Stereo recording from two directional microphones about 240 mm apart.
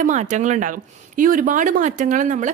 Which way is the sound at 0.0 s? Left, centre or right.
Right.